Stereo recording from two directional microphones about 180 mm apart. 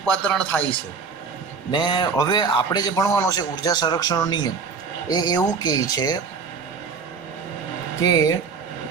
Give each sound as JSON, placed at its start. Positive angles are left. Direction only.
{"t": 0.0, "sound": "speech", "side_deg": 5}
{"t": 1.7, "sound": "a man's voice", "side_deg": 25}
{"t": 8.0, "sound": "a man's voice", "side_deg": 20}